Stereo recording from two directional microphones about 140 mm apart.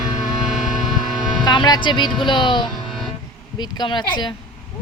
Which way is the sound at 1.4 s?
30° left (ahead or behind).